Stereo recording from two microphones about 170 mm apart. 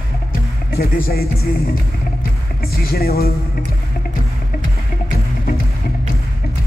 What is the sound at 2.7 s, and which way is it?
Speech, 65° left (ahead or behind).